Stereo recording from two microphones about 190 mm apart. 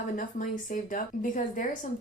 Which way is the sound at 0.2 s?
45° left (ahead or behind).